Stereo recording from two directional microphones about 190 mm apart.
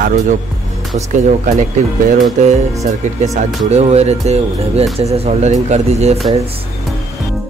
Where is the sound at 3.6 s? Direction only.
35° right (ahead or behind).